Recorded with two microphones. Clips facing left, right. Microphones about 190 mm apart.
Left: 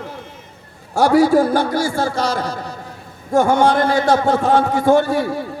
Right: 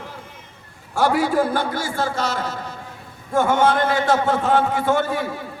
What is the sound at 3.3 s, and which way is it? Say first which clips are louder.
A man's voice: left 4 dB; 40° left (ahead or behind).